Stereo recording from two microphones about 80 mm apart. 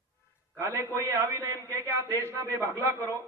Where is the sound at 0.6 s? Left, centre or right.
Right.